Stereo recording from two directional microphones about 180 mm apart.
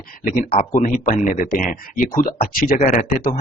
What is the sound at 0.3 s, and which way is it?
Speech, 45° left (ahead or behind).